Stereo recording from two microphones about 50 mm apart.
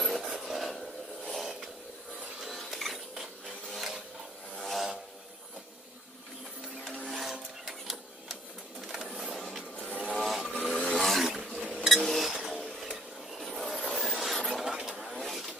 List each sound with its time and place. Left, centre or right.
0.0 s filing: centre
1.3 s vehicle: centre
2.4 s a sound: centre
4.6 s vehicle: centre
7.1 s wood: centre
8.8 s printer: centre
10.0 s vehicle: centre
10.7 s a sound: left
11.0 s roar: centre
11.3 s a sound: centre
13.3 s filing: centre
14.6 s a sound: centre